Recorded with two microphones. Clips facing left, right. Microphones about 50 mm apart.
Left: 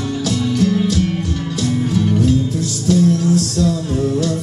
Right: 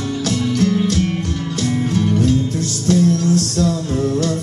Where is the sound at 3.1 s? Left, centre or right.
Centre.